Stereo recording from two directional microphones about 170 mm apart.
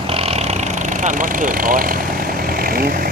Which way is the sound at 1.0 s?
50° right (ahead or behind).